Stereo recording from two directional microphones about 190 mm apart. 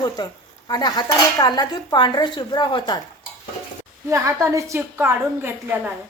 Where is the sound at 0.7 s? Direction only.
20° left (ahead or behind).